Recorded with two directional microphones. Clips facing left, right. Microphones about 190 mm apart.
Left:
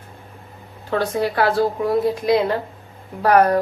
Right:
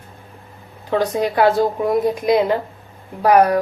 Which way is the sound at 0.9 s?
15° right (ahead or behind).